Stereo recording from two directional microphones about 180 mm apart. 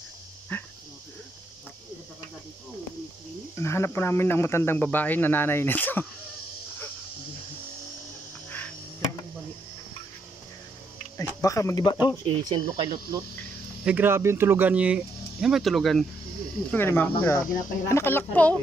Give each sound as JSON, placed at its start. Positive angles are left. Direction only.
{"t": 0.5, "sound": "speech", "side_deg": 10}
{"t": 3.5, "sound": "speech", "side_deg": 15}
{"t": 8.5, "sound": "a sound", "side_deg": 10}
{"t": 11.1, "sound": "speech", "side_deg": 15}
{"t": 12.4, "sound": "speech", "side_deg": -25}
{"t": 13.8, "sound": "speech", "side_deg": -10}
{"t": 16.7, "sound": "speech", "side_deg": 10}